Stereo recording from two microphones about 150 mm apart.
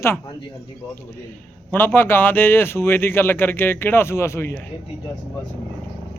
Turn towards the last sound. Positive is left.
turn(degrees=15)  # may be behind; listen again after turning